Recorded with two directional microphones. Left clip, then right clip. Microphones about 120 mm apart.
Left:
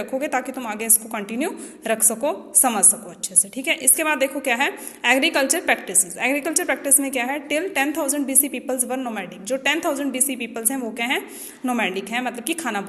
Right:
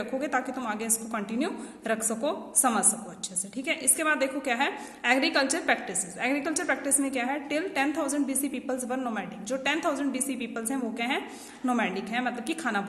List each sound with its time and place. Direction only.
0.0 s a woman's voice: 20° left (ahead or behind)